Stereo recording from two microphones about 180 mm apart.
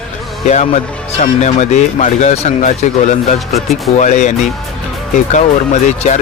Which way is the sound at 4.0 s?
40° left (ahead or behind).